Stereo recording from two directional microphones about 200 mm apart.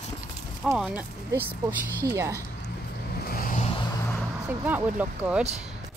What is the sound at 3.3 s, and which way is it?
Vehicle, 45° left (ahead or behind).